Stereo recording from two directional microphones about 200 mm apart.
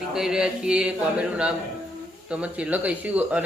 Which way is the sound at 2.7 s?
5° right (ahead or behind).